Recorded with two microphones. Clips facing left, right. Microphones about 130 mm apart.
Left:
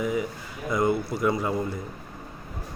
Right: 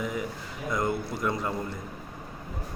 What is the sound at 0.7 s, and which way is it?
Speech, 5° left (ahead or behind).